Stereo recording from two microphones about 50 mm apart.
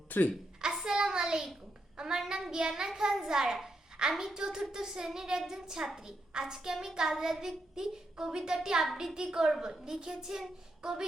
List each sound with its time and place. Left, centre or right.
0.1 s a woman's voice: left
0.7 s a sound: centre
2.0 s child singing: centre
2.5 s a child's voice: centre